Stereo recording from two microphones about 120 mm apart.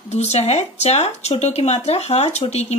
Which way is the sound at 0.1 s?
60° left (ahead or behind).